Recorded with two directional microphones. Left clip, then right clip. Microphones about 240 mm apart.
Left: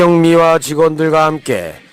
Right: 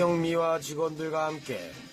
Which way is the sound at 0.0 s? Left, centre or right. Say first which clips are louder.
Left 17 dB; left.